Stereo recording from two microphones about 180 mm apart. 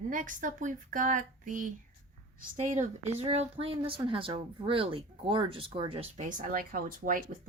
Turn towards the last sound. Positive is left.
turn(degrees=-50)  # may be behind; listen again after turning